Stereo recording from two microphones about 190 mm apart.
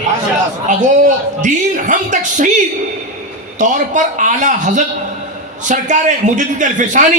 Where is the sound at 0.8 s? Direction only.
40° right (ahead or behind).